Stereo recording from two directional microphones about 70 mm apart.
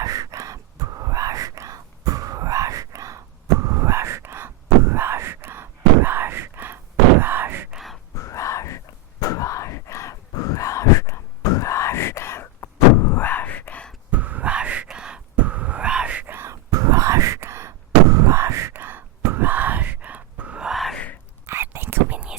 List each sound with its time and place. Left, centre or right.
0.0 s whispering: right
7.2 s wail: right
7.7 s whispering: centre
8.1 s a sound: left
13.1 s whispering: left
14.1 s a sound: right
15.9 s whispering: centre
16.3 s whispering: right
16.7 s a sound: right; by 20.7 s centre
20.7 s whispering: centre
21.4 s whispering: right